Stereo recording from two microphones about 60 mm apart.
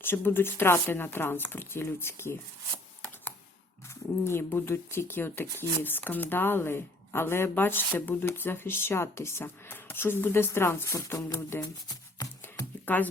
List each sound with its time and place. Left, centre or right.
0.0 s speech: left
4.2 s speech: left
9.4 s speech: left
12.8 s music: left